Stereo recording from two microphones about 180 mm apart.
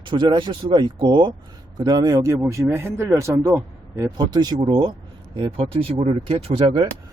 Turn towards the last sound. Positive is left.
turn(degrees=-30)  # may be behind; listen again after turning